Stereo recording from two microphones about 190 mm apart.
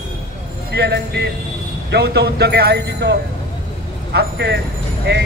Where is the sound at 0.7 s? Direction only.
60° right (ahead or behind).